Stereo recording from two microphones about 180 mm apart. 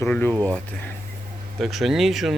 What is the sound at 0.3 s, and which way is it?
Speech, 15° right (ahead or behind).